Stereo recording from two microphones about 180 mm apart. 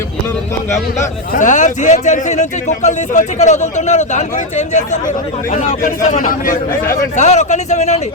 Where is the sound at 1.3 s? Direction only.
45° left (ahead or behind).